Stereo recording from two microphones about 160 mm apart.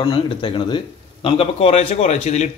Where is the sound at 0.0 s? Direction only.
30° left (ahead or behind).